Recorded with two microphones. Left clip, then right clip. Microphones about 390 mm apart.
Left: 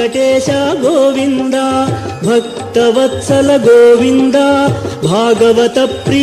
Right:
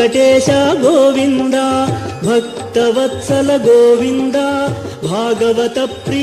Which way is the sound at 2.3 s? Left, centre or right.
Left.